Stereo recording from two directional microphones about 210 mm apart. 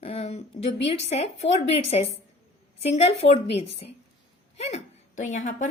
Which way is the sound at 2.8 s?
30° left (ahead or behind).